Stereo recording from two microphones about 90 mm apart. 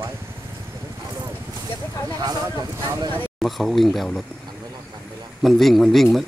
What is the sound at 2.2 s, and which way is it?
Speech, 45° right (ahead or behind).